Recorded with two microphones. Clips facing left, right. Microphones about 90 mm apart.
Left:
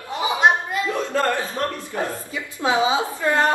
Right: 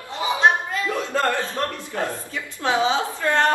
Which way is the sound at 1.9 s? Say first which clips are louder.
Right 2 dB; 10° left (ahead or behind).